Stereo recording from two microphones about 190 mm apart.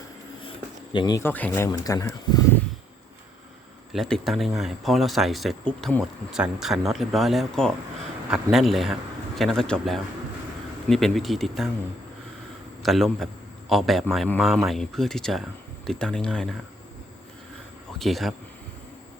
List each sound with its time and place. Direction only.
0.9 s speech: 20° left (ahead or behind)
1.2 s speech: 10° left (ahead or behind)
3.9 s speech: centre (ahead or behind)
12.8 s speech: centre (ahead or behind)
18.0 s speech: centre (ahead or behind)